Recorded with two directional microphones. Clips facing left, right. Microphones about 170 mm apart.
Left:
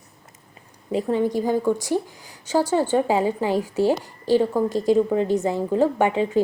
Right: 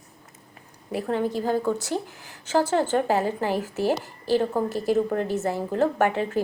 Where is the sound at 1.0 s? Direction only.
15° left (ahead or behind).